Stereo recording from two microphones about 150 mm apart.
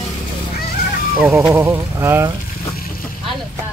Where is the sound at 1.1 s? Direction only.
20° right (ahead or behind).